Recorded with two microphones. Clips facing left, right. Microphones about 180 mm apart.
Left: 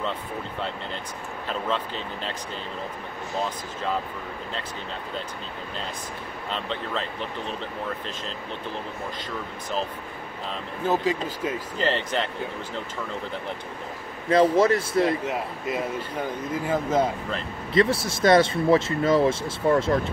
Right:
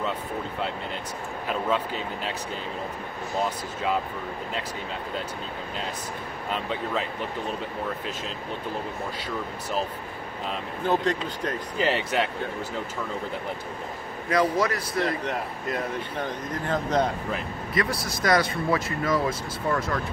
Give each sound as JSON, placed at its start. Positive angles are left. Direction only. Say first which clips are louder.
{"t": 6.5, "sound": "speech", "louder": "right 2 dB", "side_deg": -10}
{"t": 11.2, "sound": "speech", "louder": "left 1 dB", "side_deg": 5}
{"t": 11.8, "sound": "speech", "louder": "right 1 dB", "side_deg": -10}
{"t": 14.3, "sound": "speech", "louder": "left 5 dB", "side_deg": 30}
{"t": 15.0, "sound": "speech", "louder": "left 4 dB", "side_deg": 0}
{"t": 17.7, "sound": "speech", "louder": "left 6 dB", "side_deg": 25}